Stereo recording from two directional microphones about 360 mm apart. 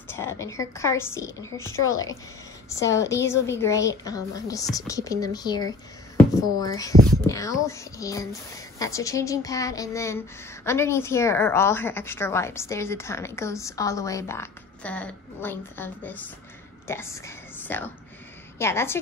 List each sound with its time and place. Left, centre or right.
0.1 s speech: centre